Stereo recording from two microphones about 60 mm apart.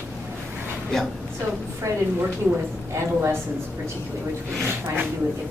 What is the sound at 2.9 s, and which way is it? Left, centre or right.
Speech, right.